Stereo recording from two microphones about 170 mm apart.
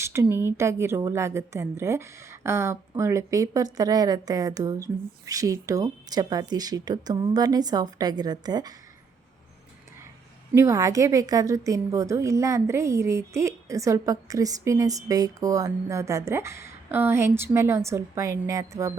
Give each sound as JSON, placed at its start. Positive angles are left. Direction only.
{"t": 0.0, "sound": "a woman's voice", "side_deg": -15}
{"t": 10.5, "sound": "a woman's voice", "side_deg": -15}